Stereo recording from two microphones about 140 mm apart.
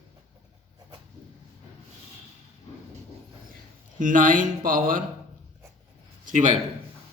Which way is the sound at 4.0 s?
70° right (ahead or behind).